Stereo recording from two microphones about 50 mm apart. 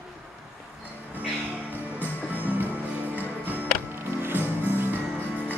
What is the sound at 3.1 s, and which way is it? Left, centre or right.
Music, right.